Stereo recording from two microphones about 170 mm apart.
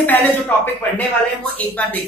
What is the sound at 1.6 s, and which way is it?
Speech, 10° left (ahead or behind).